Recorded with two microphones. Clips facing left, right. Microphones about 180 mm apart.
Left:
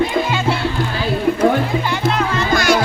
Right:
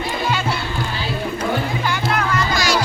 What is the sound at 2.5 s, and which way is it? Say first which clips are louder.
Music: left 7 dB; 55° left (ahead or behind).